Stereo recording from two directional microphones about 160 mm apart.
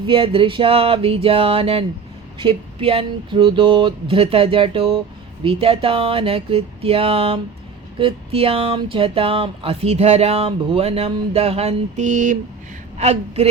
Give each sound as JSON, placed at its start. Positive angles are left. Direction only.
{"t": 0.1, "sound": "a woman's voice", "side_deg": -35}